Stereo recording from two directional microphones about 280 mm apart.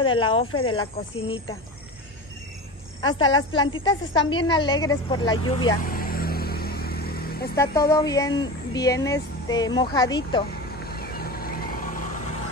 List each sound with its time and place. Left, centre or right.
0.0 s speech: centre
3.0 s speech: centre
5.9 s vehicle: left
7.5 s speech: centre
10.9 s vehicle: left